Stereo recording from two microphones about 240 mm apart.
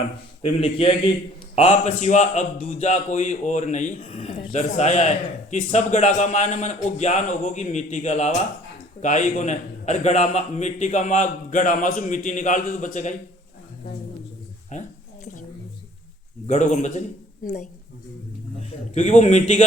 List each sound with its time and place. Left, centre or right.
0.4 s a man's voice: left
14.7 s a sound: left
16.5 s a man's voice: left
18.9 s a man's voice: left